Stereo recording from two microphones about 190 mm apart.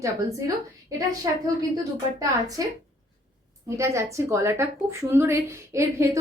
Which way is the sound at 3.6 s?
15° right (ahead or behind).